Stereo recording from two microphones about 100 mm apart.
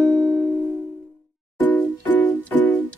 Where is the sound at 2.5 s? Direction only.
10° left (ahead or behind).